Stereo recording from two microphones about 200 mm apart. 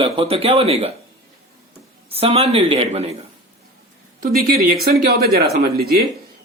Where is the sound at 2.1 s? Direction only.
30° right (ahead or behind).